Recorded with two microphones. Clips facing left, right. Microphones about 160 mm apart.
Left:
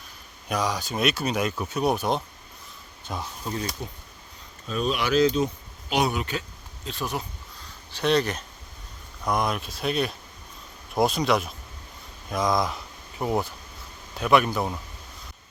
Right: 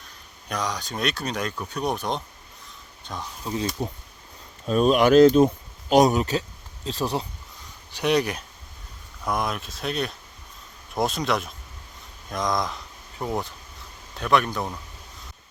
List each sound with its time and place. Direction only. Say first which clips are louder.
0.4 s speech: left 2 dB; 5° left (ahead or behind)
3.8 s speech: right 7 dB; 40° right (ahead or behind)
7.9 s speech: right 1 dB; 15° right (ahead or behind)
9.2 s speech: left 1 dB; centre (ahead or behind)